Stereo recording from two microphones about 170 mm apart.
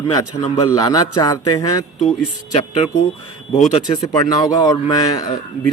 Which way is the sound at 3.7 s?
25° left (ahead or behind).